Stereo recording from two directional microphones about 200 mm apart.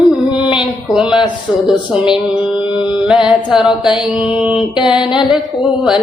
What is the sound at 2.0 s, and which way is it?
Mantra, 5° right (ahead or behind).